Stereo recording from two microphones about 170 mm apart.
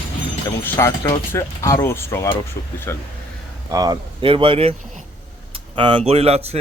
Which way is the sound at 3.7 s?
25° right (ahead or behind).